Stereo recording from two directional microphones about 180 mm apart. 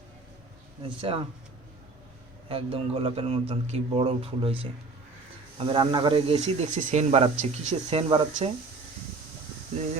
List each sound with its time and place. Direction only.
2.5 s speech: 30° right (ahead or behind)